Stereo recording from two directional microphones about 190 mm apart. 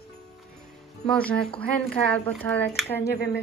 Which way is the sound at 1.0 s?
5° left (ahead or behind).